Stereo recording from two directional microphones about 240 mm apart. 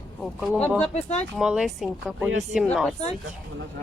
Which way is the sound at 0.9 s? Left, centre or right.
Left.